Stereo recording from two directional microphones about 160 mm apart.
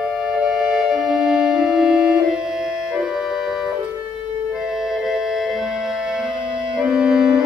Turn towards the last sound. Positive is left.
turn(degrees=-5)  # may be behind; listen again after turning